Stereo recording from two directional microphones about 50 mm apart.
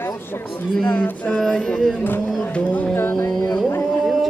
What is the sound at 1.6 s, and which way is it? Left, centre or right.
Music, centre.